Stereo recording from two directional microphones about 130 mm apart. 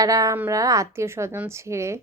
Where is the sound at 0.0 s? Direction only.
25° right (ahead or behind).